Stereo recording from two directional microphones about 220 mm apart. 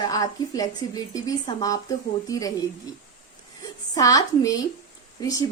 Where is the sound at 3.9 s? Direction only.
15° left (ahead or behind).